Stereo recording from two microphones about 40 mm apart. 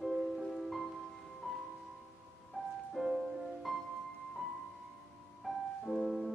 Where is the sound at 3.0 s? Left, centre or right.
Centre.